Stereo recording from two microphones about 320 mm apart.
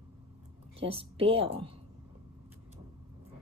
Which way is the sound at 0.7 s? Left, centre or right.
Centre.